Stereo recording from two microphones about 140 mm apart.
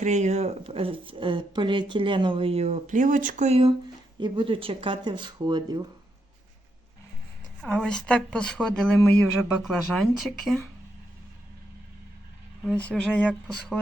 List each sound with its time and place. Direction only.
0.0 s speech: 55° right (ahead or behind)
4.2 s speech: 35° right (ahead or behind)
7.6 s speech: 5° left (ahead or behind)
12.6 s speech: 5° left (ahead or behind)